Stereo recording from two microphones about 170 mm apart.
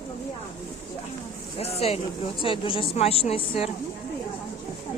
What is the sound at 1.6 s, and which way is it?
Speech, 35° left (ahead or behind).